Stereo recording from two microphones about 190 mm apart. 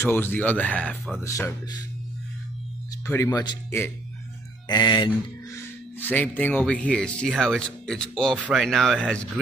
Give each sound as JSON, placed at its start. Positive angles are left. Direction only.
{"t": 0.0, "sound": "speech", "side_deg": 10}
{"t": 1.2, "sound": "speech", "side_deg": 15}
{"t": 3.1, "sound": "speech", "side_deg": 15}
{"t": 5.9, "sound": "speech", "side_deg": 10}